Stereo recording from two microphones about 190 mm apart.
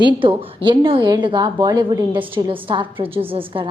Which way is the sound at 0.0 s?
25° right (ahead or behind).